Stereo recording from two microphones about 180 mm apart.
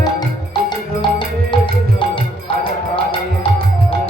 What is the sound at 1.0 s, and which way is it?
Music, 25° left (ahead or behind).